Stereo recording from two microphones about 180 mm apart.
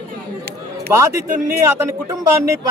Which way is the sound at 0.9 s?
15° right (ahead or behind).